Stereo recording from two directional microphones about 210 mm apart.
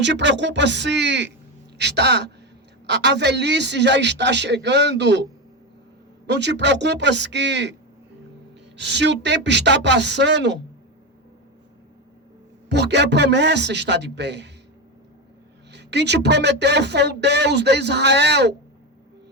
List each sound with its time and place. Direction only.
0.0 s a man's voice: 60° right (ahead or behind)
6.2 s a man's voice: 55° right (ahead or behind)
8.8 s a man's voice: 55° right (ahead or behind)
12.6 s a man's voice: 55° right (ahead or behind)
15.7 s speech: 55° right (ahead or behind)